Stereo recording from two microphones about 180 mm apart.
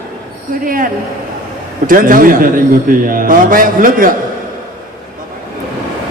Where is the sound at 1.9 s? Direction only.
50° right (ahead or behind).